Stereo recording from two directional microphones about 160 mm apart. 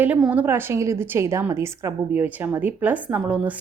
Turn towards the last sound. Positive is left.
turn(degrees=-10)  # may be behind; listen again after turning